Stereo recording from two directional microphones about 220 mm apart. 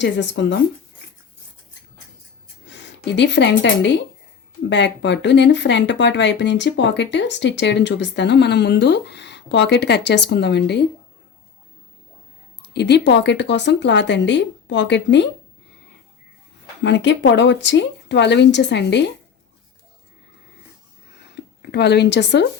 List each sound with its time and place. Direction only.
0.0 s speech: 55° left (ahead or behind)
2.6 s a sound: 55° left (ahead or behind)
3.6 s speech: 55° left (ahead or behind)
12.6 s speech: 50° left (ahead or behind)
16.8 s speech: 55° left (ahead or behind)
21.3 s speech: 50° left (ahead or behind)